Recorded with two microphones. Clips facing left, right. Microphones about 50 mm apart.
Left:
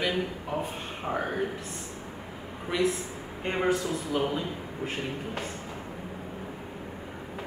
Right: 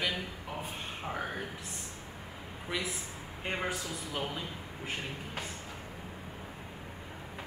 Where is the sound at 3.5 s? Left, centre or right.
Centre.